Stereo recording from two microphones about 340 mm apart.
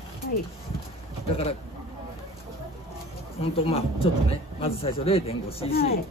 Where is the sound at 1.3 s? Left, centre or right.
Centre.